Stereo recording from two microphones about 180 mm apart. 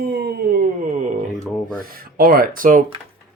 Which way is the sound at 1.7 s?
55° right (ahead or behind).